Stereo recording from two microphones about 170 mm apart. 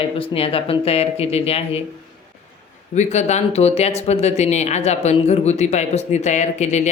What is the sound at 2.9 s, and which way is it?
Speech, 45° left (ahead or behind).